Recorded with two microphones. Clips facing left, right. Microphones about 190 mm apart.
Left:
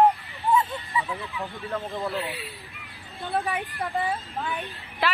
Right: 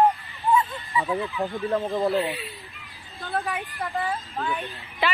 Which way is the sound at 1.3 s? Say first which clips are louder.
Right 4 dB; 35° right (ahead or behind).